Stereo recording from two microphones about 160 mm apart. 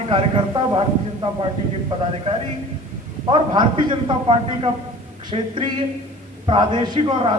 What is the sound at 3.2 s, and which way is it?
Speech, 30° right (ahead or behind).